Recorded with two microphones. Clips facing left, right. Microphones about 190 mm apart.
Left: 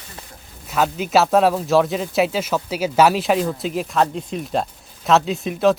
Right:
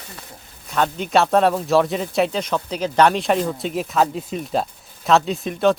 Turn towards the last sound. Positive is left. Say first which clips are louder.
# left 1 dB
turn(degrees=0)  # may be behind; listen again after turning